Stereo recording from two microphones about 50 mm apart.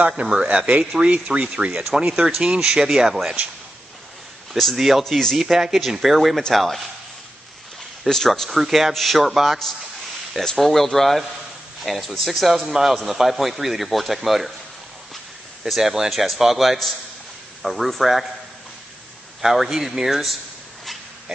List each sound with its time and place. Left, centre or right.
0.3 s speech: centre
4.6 s a man's voice: centre
5.0 s speech: centre
5.4 s a man's voice: centre
8.1 s a man's voice: centre
15.6 s a man's voice: centre
19.4 s a man's voice: centre